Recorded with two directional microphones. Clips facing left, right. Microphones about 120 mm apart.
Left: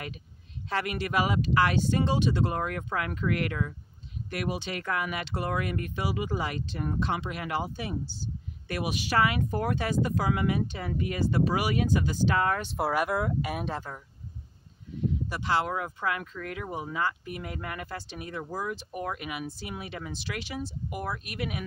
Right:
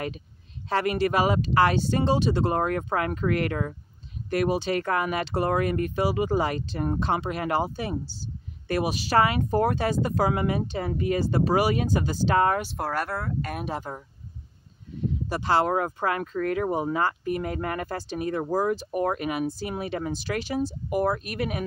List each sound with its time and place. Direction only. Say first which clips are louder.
0.7 s speech: right 7 dB; 35° right (ahead or behind)
12.6 s speech: left 2 dB; 5° left (ahead or behind)
13.9 s speech: right 5 dB; 25° right (ahead or behind)
15.2 s speech: right 7 dB; 35° right (ahead or behind)